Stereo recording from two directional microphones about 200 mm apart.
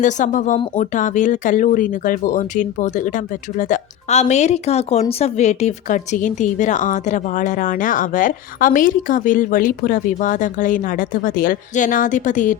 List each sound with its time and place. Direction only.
0.0 s speech: 40° left (ahead or behind)